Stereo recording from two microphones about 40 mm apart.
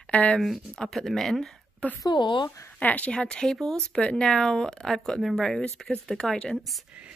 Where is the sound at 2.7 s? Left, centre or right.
Left.